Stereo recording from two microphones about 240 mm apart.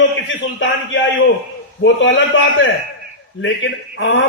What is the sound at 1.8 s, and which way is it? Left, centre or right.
A man's voice, left.